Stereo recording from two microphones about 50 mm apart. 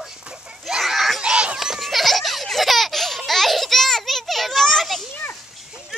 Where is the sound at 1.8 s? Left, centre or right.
Centre.